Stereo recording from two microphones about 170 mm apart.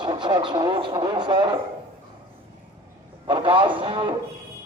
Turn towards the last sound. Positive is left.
turn(degrees=-30)  # may be behind; listen again after turning